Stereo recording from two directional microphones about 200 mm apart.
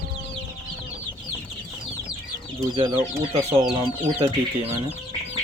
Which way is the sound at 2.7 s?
20° right (ahead or behind).